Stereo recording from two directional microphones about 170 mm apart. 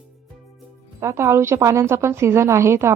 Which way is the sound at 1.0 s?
15° right (ahead or behind).